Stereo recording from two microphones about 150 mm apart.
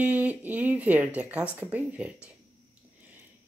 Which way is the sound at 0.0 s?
10° right (ahead or behind).